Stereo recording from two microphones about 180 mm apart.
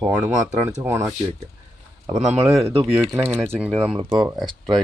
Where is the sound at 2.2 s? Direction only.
35° right (ahead or behind).